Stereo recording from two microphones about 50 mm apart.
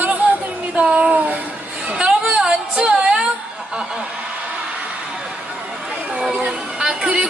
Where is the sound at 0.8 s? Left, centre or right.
Centre.